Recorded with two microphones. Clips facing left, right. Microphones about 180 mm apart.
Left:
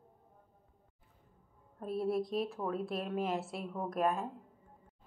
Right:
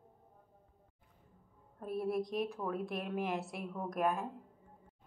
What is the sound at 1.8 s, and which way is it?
Music, 30° left (ahead or behind).